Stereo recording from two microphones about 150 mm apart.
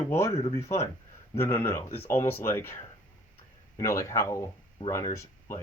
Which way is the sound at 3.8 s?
20° left (ahead or behind).